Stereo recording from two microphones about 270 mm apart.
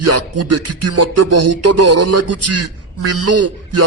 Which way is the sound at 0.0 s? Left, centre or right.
Right.